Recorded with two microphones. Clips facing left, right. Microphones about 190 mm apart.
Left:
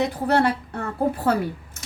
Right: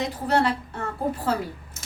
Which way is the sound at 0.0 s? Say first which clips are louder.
Left 3 dB; 60° left (ahead or behind).